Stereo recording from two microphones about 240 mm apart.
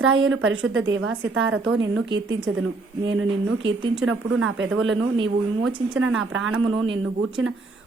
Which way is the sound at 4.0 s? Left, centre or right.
Right.